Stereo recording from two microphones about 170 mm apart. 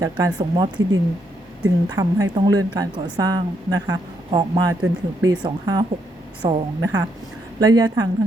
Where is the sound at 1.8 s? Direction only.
20° right (ahead or behind).